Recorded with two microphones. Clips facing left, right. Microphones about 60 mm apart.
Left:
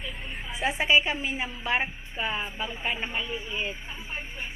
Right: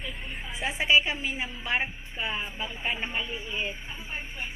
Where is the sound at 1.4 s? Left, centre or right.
Centre.